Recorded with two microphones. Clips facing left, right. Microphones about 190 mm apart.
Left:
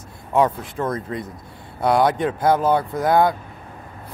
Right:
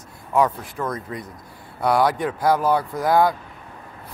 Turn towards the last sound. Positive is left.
turn(degrees=25)  # may be behind; listen again after turning